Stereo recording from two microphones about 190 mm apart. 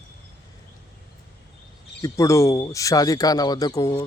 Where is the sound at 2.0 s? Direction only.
15° left (ahead or behind).